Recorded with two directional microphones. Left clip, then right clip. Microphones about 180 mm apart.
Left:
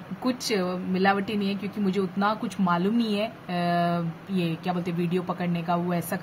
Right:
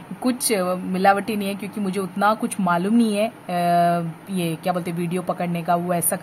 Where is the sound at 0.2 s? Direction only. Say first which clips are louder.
Right 5 dB; 45° right (ahead or behind).